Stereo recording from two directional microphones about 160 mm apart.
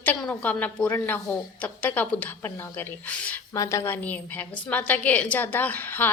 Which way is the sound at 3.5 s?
20° left (ahead or behind).